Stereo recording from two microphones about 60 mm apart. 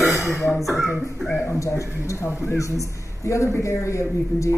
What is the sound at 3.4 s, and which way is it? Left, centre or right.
Speech, left.